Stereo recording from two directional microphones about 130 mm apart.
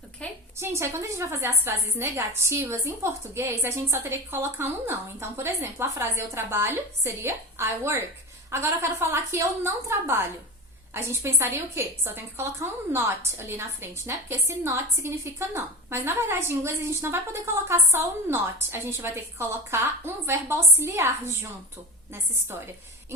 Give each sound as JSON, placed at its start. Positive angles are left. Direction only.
{"t": 0.6, "sound": "a woman's voice", "side_deg": -20}